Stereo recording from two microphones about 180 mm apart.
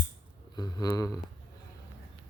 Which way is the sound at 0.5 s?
20° left (ahead or behind).